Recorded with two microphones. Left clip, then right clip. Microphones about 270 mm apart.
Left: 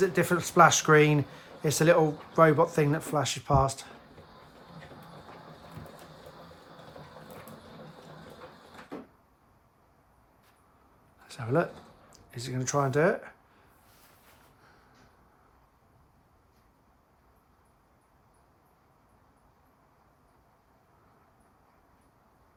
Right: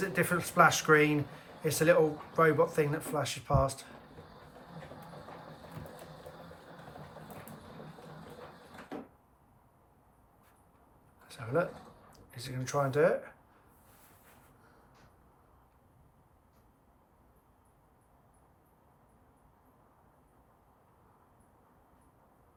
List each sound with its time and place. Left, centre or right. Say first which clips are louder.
0.0 s speech: left 5 dB; centre
8.9 s cupboard open or close: left 1 dB; centre
11.3 s a sound: left 4 dB; left
12.1 s speech: left 6 dB; left